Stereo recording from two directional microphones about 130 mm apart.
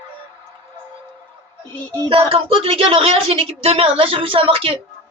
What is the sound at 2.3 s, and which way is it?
A woman's voice, 45° right (ahead or behind).